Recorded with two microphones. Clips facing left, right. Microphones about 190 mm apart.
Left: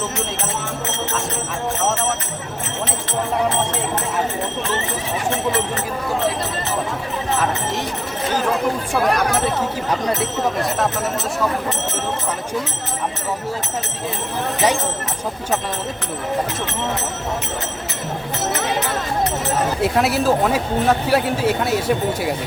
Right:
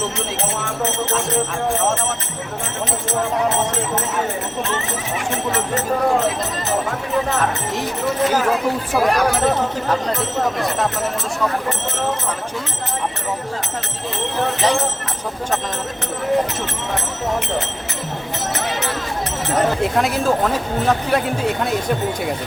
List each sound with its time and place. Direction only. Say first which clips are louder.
9.0 s speech: right 2 dB; centre (ahead or behind)
19.8 s speech: left 1 dB; 5° left (ahead or behind)